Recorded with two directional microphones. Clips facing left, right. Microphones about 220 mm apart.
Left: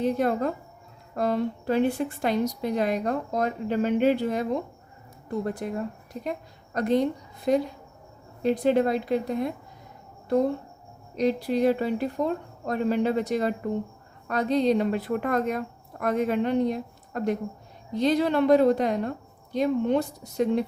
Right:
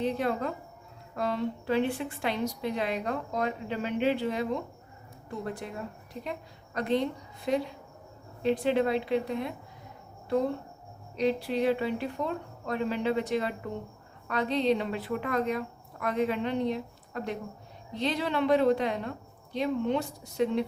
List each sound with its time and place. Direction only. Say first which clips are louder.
0.0 s a woman's voice: left 5 dB; 45° left (ahead or behind)
5.5 s a woman's voice: left 7 dB; 45° left (ahead or behind)
11.2 s a woman's voice: left 4 dB; 40° left (ahead or behind)